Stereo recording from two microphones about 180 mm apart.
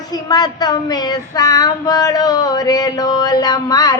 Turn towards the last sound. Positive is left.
turn(degrees=20)  # may be behind; listen again after turning